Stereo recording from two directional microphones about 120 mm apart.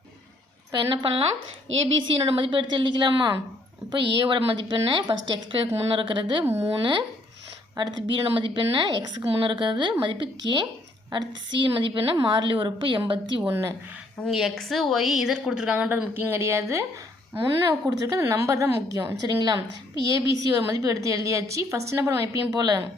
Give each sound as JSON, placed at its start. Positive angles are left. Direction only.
{"t": 0.7, "sound": "a woman's voice", "side_deg": -45}
{"t": 6.4, "sound": "a woman's voice", "side_deg": -25}
{"t": 7.8, "sound": "a woman's voice", "side_deg": -40}
{"t": 12.2, "sound": "a woman's voice", "side_deg": -45}
{"t": 13.5, "sound": "a woman's voice", "side_deg": -25}
{"t": 14.3, "sound": "a woman's voice", "side_deg": 0}
{"t": 19.2, "sound": "a woman's voice", "side_deg": -35}